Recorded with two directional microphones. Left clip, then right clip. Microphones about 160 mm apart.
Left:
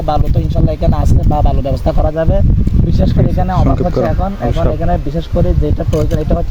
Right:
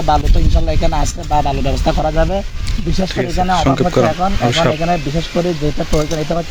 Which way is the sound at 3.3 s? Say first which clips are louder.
Right 2 dB; 15° left (ahead or behind).